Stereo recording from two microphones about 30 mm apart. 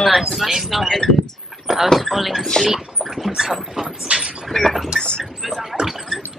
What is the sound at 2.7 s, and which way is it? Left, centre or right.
Speech, centre.